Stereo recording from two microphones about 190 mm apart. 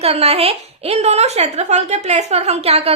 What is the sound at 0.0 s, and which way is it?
A woman's voice, 30° right (ahead or behind).